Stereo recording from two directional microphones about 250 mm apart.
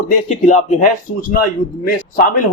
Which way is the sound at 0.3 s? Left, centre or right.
Left.